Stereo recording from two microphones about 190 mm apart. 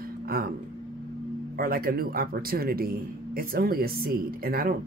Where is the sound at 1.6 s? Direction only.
50° right (ahead or behind).